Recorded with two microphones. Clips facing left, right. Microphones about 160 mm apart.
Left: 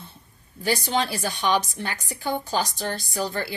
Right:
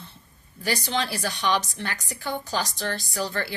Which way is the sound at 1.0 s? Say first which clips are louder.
Left 2 dB; 20° left (ahead or behind).